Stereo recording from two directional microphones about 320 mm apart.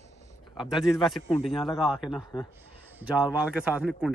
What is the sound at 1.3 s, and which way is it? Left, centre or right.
Speech, centre.